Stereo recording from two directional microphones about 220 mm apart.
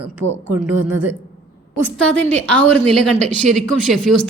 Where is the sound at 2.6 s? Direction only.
90° right.